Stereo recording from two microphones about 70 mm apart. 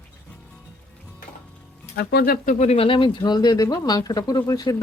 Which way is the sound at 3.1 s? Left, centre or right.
Left.